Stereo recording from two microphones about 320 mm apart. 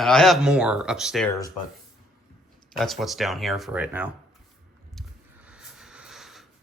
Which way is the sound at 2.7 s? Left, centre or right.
Centre.